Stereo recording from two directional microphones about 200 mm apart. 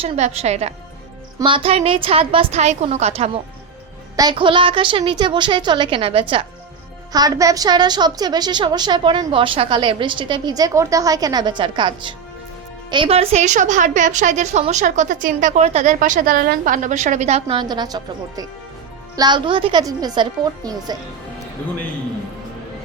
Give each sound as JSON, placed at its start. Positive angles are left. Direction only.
{"t": 0.0, "sound": "a woman's voice", "side_deg": -30}